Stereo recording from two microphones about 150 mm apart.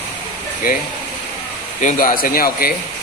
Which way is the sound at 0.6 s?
70° left (ahead or behind).